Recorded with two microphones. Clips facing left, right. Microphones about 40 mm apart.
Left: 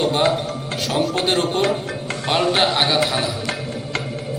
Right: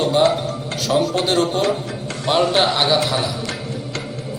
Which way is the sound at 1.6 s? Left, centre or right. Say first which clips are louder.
Even; left.